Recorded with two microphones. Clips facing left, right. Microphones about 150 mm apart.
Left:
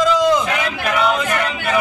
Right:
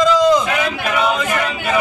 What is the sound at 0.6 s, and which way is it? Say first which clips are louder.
A man's voice: right 1 dB; 15° right (ahead or behind).